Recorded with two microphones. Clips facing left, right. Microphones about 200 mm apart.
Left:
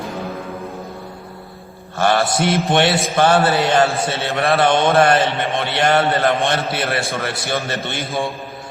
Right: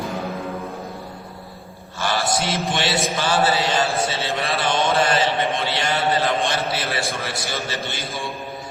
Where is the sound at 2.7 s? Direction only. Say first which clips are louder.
Left 6 dB; 60° left (ahead or behind).